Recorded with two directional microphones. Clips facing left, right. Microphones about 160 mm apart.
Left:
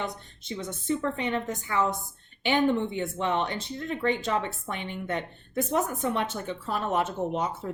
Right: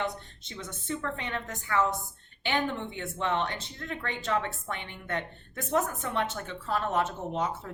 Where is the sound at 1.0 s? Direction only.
15° left (ahead or behind).